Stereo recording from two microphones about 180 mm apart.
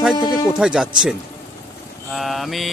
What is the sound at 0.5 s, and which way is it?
Mantra, 5° right (ahead or behind).